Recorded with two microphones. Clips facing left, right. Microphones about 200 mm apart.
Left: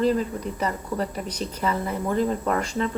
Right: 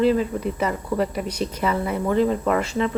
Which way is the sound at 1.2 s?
10° right (ahead or behind).